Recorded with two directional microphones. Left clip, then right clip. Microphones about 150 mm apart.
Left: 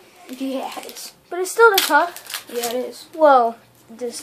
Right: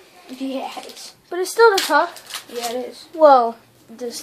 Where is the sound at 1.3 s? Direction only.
25° right (ahead or behind).